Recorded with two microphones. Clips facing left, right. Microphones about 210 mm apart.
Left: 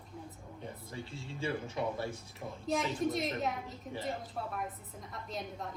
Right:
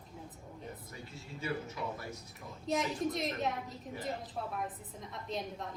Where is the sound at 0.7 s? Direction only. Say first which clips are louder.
Left 3 dB; 30° left (ahead or behind).